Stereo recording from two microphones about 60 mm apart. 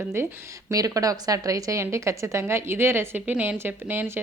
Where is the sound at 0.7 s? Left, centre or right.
Right.